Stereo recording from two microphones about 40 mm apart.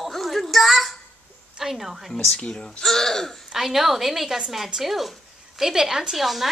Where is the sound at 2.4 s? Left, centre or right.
Centre.